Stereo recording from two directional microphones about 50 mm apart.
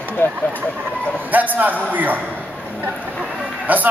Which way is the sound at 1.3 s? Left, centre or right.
Right.